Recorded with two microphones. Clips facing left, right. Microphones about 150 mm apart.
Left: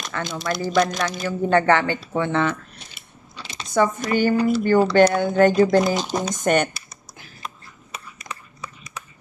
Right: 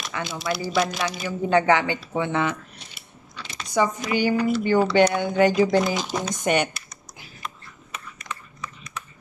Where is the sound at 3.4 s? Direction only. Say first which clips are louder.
Left 1 dB; 30° left (ahead or behind).